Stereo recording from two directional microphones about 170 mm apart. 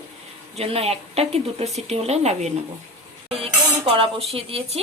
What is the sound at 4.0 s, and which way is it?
Speech, 35° right (ahead or behind).